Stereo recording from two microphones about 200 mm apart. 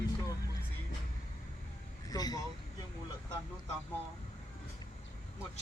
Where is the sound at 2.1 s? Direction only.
20° left (ahead or behind).